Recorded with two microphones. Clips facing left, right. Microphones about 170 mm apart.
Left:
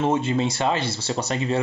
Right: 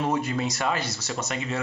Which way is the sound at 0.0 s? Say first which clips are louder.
Left 4 dB; 25° left (ahead or behind).